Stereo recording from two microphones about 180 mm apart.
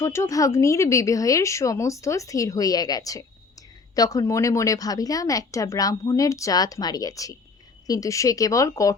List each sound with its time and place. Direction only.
0.0 s a woman's voice: 15° left (ahead or behind)